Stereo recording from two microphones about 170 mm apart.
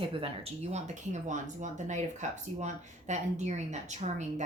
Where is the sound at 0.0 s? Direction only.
30° right (ahead or behind).